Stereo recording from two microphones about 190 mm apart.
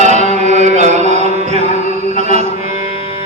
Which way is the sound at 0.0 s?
40° right (ahead or behind).